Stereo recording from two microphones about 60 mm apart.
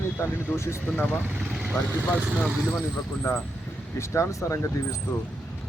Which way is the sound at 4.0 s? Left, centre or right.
Left.